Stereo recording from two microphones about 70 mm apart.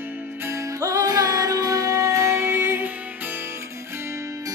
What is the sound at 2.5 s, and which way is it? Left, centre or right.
Music, right.